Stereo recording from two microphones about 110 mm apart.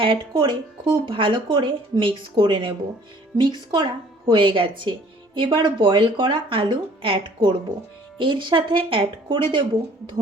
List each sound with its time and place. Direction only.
0.0 s speech: 50° right (ahead or behind)